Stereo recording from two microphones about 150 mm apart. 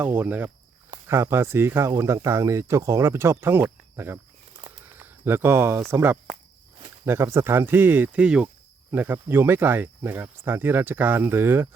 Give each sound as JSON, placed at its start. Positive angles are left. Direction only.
{"t": 0.0, "sound": "speech", "side_deg": -10}
{"t": 4.9, "sound": "a sound", "side_deg": -15}
{"t": 5.9, "sound": "speech", "side_deg": -15}